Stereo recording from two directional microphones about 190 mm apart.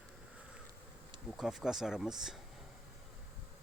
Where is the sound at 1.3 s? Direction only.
Centre (ahead or behind).